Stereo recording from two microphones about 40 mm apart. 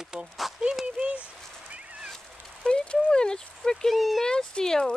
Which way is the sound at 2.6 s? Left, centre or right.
Left.